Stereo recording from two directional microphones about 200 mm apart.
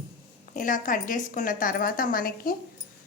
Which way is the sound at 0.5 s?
40° left (ahead or behind).